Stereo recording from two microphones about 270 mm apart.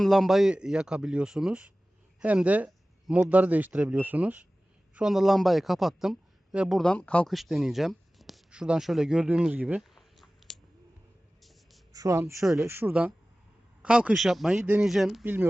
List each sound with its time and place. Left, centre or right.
0.0 s a man's voice: centre
11.9 s speech: centre